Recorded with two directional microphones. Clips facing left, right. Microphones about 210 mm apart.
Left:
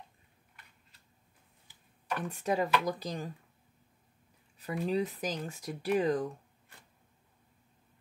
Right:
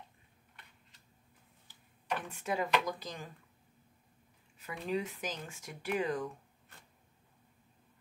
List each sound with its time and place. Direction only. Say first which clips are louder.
2.1 s speech: left 5 dB; 40° left (ahead or behind)
4.6 s speech: left 5 dB; 35° left (ahead or behind)